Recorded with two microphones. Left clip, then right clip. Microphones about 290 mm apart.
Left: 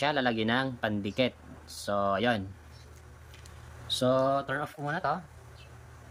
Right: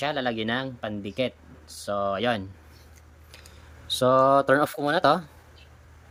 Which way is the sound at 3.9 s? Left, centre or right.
Centre.